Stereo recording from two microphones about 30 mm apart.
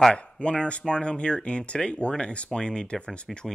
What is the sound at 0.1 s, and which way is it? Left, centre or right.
Speech, left.